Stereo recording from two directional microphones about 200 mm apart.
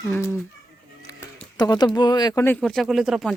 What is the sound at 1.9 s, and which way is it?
Speech, 20° left (ahead or behind).